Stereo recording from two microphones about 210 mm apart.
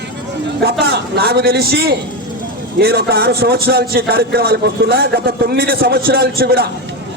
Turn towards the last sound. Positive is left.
turn(degrees=-45)  # may be behind; listen again after turning